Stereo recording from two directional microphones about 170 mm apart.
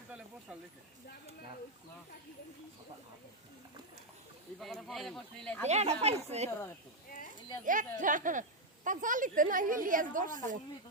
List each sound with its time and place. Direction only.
4.6 s speech: centre (ahead or behind)
5.6 s speech: 40° right (ahead or behind)
7.6 s speech: 50° right (ahead or behind)